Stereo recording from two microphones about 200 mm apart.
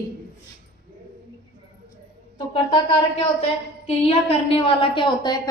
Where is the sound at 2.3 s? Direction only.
25° left (ahead or behind).